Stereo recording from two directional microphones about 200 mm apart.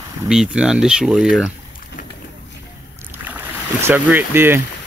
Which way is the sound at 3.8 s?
10° right (ahead or behind).